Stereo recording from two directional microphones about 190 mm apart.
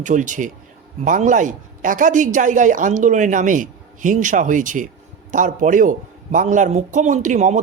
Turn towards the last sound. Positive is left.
turn(degrees=-40)  # may be behind; listen again after turning